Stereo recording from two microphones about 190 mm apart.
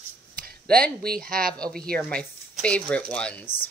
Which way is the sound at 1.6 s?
5° left (ahead or behind).